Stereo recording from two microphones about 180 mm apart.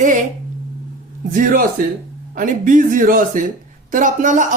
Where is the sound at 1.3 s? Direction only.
50° right (ahead or behind).